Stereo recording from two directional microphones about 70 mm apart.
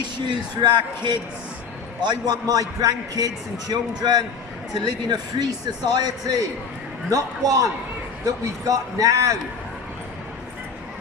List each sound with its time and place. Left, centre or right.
0.0 s a man's voice: right
7.1 s a man's voice: right